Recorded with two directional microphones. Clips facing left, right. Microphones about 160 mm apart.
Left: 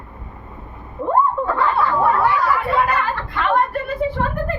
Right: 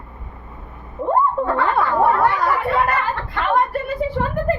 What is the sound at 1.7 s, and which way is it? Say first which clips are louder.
Snicker: right 2 dB; 50° right (ahead or behind).